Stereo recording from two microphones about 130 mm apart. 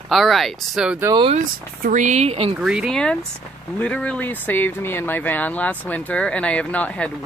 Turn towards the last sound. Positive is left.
turn(degrees=10)  # may be behind; listen again after turning